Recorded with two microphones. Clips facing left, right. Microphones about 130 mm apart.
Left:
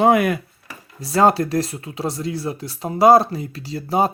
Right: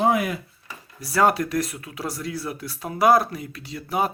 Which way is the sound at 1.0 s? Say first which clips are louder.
Left 4 dB; 25° left (ahead or behind).